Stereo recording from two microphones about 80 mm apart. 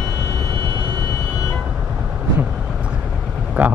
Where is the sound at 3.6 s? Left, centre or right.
Right.